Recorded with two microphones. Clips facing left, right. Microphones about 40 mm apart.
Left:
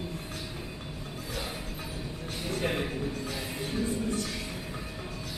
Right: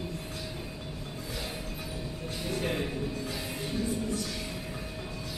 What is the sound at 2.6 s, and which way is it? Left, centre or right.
Music, centre.